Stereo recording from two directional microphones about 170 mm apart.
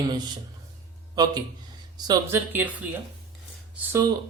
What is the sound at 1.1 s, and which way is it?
A man's voice, 25° right (ahead or behind).